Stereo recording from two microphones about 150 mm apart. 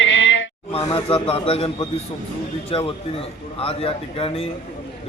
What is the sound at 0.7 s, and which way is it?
A man's voice, 40° left (ahead or behind).